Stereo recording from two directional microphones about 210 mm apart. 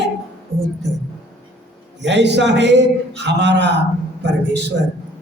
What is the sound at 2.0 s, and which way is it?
A man's voice, 55° right (ahead or behind).